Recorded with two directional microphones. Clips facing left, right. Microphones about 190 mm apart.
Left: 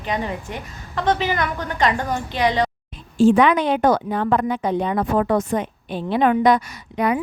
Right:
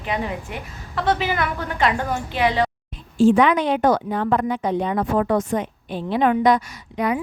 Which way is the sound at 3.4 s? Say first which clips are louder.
Left 1 dB; 60° left (ahead or behind).